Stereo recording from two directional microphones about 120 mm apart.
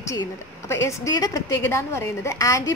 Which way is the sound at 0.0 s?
25° left (ahead or behind).